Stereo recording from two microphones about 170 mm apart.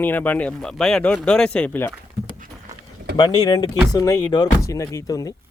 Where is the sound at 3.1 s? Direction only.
25° left (ahead or behind).